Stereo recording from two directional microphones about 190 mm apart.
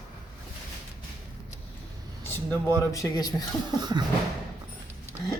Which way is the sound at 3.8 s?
20° right (ahead or behind).